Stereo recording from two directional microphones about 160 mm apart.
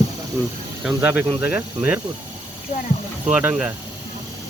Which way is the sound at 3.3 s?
10° right (ahead or behind).